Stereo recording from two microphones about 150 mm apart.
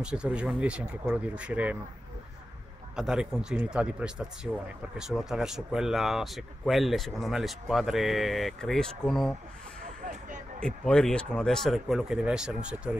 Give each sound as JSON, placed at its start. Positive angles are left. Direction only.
{"t": 0.0, "sound": "speech", "side_deg": -5}
{"t": 3.0, "sound": "speech", "side_deg": -5}
{"t": 10.6, "sound": "speech", "side_deg": 5}